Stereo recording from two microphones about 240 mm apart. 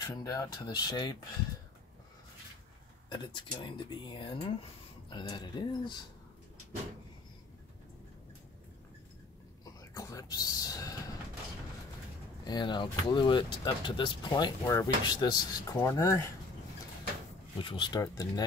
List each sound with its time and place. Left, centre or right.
0.0 s speech: centre
3.1 s speech: centre
9.8 s speech: centre
12.4 s speech: centre
17.6 s speech: centre